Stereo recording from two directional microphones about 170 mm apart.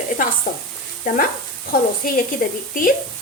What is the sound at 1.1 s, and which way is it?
Speech, 55° left (ahead or behind).